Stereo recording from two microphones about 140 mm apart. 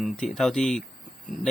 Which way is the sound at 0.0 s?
Centre (ahead or behind).